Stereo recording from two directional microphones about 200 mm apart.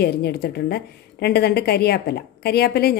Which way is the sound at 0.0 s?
55° left (ahead or behind).